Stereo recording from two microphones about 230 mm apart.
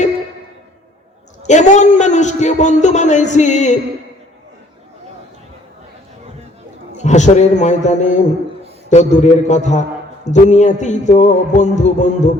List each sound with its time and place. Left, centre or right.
1.5 s a man's voice: left
6.9 s a man's voice: left